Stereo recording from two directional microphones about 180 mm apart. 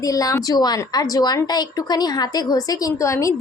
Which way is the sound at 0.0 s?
20° left (ahead or behind).